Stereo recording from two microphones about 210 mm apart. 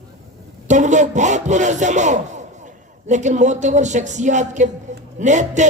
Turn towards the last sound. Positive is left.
turn(degrees=-35)  # may be behind; listen again after turning